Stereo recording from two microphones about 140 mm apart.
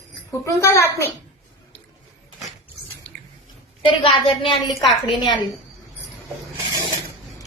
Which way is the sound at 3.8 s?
35° left (ahead or behind).